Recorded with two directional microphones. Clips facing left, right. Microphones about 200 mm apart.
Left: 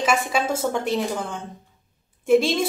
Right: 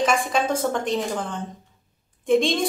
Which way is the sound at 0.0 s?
5° left (ahead or behind).